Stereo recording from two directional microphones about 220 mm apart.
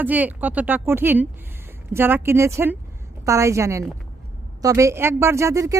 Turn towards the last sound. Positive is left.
turn(degrees=-15)  # may be behind; listen again after turning